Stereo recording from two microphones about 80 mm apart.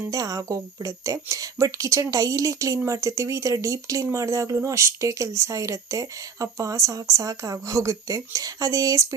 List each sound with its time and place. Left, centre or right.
0.1 s speech: right